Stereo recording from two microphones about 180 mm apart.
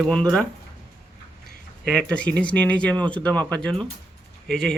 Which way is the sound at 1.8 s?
5° left (ahead or behind).